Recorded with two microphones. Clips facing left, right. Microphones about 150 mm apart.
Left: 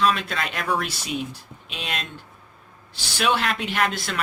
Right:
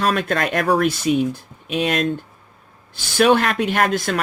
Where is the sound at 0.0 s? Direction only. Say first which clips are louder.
Right 4 dB; 50° right (ahead or behind).